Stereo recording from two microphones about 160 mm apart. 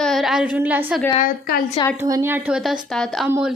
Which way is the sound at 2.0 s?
15° right (ahead or behind).